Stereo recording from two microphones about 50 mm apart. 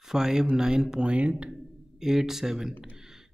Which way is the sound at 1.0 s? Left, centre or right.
Right.